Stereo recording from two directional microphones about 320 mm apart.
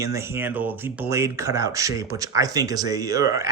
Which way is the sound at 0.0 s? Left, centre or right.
Centre.